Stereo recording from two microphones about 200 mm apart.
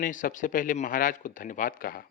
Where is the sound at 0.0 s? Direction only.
40° left (ahead or behind).